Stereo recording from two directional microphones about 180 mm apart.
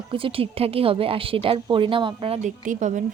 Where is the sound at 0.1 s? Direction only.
30° right (ahead or behind).